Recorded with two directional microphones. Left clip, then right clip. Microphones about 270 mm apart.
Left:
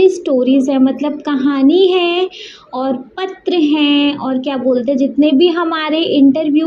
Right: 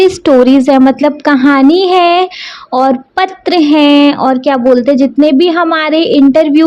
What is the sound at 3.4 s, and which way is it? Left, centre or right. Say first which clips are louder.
Speech: right 5 dB; right.